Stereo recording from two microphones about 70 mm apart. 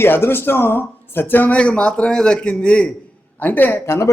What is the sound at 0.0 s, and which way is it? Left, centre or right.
Speech, left.